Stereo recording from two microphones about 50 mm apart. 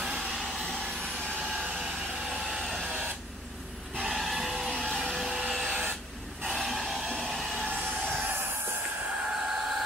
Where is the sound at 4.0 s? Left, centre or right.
Centre.